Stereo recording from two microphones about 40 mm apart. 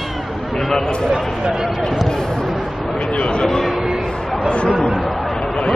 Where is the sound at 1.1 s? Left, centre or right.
Centre.